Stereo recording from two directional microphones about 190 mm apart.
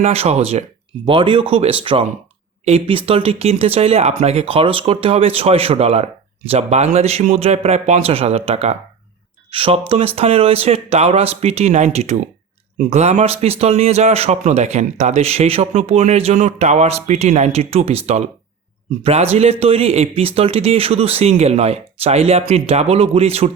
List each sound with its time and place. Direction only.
0.0 s a man's voice: 35° right (ahead or behind)